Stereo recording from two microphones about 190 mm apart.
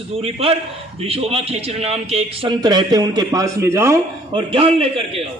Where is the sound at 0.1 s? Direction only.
30° right (ahead or behind); by 4.0 s 15° right (ahead or behind).